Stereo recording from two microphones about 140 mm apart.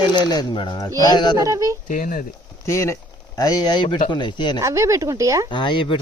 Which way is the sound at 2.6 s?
20° left (ahead or behind).